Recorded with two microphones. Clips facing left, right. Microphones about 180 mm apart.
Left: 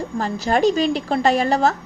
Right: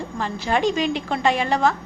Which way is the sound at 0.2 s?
40° left (ahead or behind).